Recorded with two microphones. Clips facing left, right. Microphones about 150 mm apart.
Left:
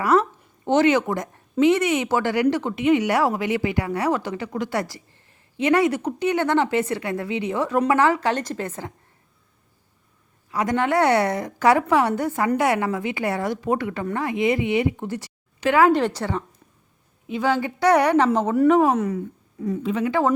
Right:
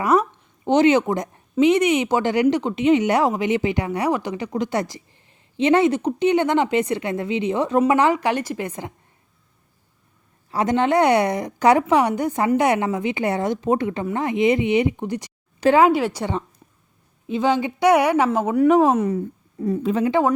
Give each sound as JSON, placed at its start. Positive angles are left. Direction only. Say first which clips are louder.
{"t": 0.0, "sound": "speech", "louder": "even", "side_deg": -15}
{"t": 10.5, "sound": "a woman's voice", "louder": "right 3 dB", "side_deg": -25}
{"t": 18.7, "sound": "a woman's voice", "louder": "right 3 dB", "side_deg": -15}
{"t": 19.6, "sound": "a woman's voice", "louder": "right 3 dB", "side_deg": -35}
{"t": 20.1, "sound": "speech", "louder": "right 1 dB", "side_deg": -20}